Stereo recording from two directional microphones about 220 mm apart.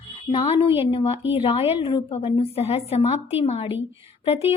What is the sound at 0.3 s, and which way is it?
A woman's voice, 25° left (ahead or behind).